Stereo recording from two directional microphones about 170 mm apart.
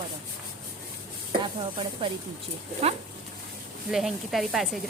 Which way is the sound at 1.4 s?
30° right (ahead or behind).